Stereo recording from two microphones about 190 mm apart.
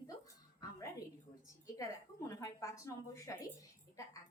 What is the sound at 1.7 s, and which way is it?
A woman's voice, 15° left (ahead or behind).